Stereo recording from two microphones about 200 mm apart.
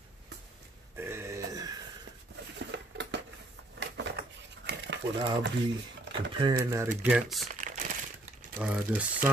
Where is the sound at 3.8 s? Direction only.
60° right (ahead or behind).